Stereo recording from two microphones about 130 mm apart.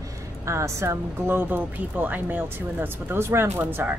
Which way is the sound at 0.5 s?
20° right (ahead or behind).